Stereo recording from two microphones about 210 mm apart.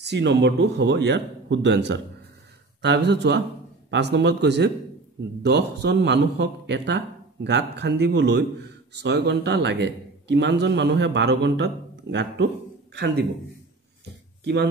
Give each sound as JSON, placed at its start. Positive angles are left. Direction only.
{"t": 0.0, "sound": "a man's voice", "side_deg": -55}
{"t": 14.4, "sound": "speech", "side_deg": -55}